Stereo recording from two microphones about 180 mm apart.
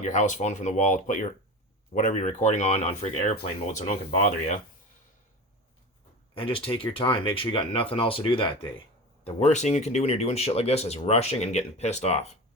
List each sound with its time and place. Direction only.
0.0 s speech: 45° left (ahead or behind)
6.3 s speech: 30° left (ahead or behind)
9.2 s speech: 40° left (ahead or behind)